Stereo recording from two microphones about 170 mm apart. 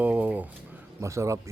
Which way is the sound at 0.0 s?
10° right (ahead or behind).